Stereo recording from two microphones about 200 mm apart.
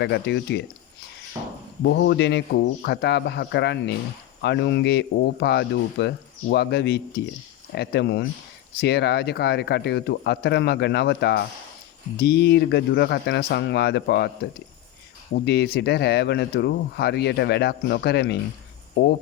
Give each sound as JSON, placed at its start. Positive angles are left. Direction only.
{"t": 0.0, "sound": "speech", "side_deg": 60}
{"t": 1.8, "sound": "speech", "side_deg": 60}
{"t": 15.4, "sound": "speech", "side_deg": 55}